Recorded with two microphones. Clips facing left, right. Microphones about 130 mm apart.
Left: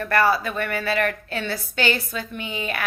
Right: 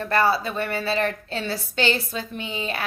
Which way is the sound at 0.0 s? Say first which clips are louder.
Left 1 dB; 25° right (ahead or behind).